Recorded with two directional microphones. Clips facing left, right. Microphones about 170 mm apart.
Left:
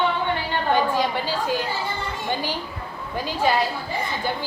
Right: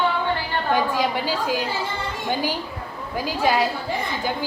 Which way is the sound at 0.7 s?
10° right (ahead or behind).